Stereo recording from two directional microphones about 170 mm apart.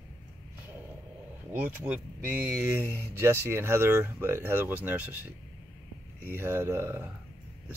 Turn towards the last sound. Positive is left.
turn(degrees=-15)  # may be behind; listen again after turning